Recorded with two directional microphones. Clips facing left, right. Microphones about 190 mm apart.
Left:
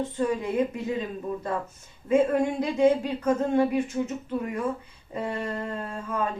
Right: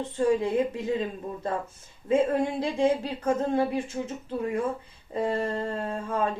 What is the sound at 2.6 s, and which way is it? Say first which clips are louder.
Speech: left 3 dB; 30° right (ahead or behind).